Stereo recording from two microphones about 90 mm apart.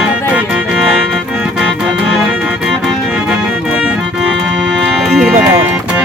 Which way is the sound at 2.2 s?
5° right (ahead or behind).